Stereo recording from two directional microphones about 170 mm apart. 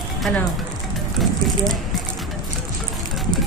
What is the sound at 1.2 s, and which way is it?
Speech, centre (ahead or behind).